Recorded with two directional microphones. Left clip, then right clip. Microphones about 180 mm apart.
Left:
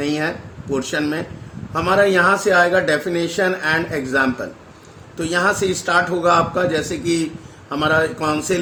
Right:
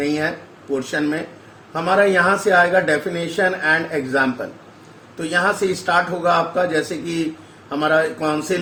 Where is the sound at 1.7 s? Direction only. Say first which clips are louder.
Left 1 dB; 40° left (ahead or behind).